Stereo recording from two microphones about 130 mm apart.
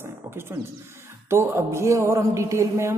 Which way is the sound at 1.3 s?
20° right (ahead or behind).